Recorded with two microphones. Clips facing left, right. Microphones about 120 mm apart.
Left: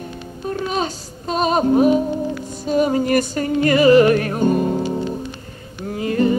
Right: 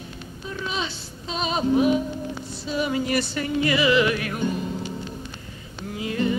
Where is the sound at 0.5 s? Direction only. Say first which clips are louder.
Left 8 dB; 45° left (ahead or behind).